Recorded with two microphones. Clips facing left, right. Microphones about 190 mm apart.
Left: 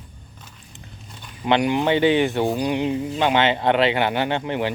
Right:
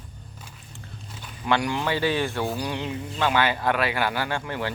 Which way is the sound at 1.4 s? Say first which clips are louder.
Left 6 dB; 20° left (ahead or behind).